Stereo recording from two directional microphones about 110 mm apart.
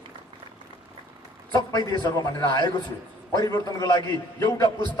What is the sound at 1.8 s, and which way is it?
A man's voice, 40° left (ahead or behind).